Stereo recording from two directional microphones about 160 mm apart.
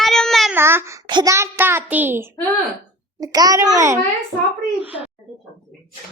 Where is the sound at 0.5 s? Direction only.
15° right (ahead or behind).